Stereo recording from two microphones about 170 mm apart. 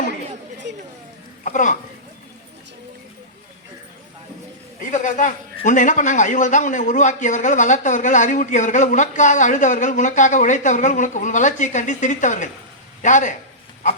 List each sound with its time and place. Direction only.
1.5 s speech: 50° left (ahead or behind)
4.8 s a sound: 50° left (ahead or behind)
5.6 s a man's voice: 50° left (ahead or behind)